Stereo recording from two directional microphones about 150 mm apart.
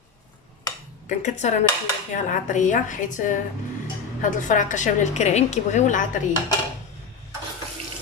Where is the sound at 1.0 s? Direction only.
50° left (ahead or behind).